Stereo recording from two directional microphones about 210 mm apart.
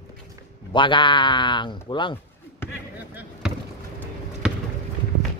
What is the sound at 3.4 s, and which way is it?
Basketball bounce, centre (ahead or behind).